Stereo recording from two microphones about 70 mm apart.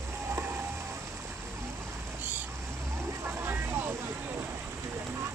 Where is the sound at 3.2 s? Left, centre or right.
Right.